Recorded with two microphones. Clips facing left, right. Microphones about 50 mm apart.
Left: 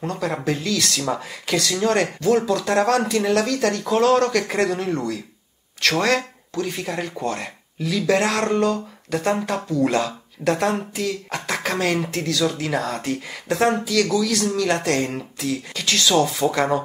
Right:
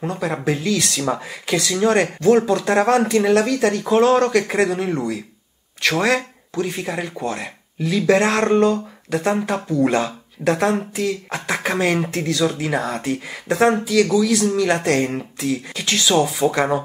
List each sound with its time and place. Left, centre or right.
0.0 s speech: centre
0.5 s speech: right
2.1 s speech: right
4.2 s speech: centre
7.8 s speech: right
9.1 s speech: centre
9.7 s speech: right; by 16.8 s centre